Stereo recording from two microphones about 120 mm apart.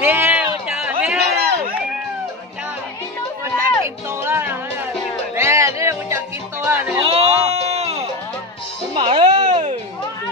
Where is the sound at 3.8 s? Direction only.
20° right (ahead or behind).